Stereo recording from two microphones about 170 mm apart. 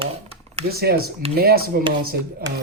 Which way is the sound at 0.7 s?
65° right (ahead or behind).